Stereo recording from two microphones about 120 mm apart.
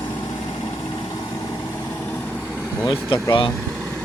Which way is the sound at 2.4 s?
10° right (ahead or behind).